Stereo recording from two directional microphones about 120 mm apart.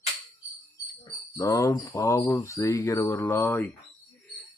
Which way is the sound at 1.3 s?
25° left (ahead or behind).